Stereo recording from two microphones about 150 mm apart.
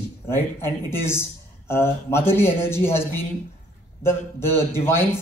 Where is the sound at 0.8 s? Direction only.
15° left (ahead or behind).